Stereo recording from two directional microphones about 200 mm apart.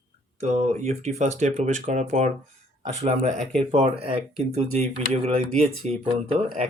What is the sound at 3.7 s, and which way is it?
Speech, 30° right (ahead or behind).